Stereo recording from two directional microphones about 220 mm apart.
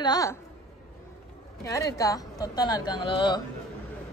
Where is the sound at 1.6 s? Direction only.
15° left (ahead or behind).